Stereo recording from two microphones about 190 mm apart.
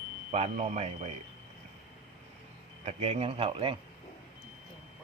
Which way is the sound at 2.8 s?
35° right (ahead or behind).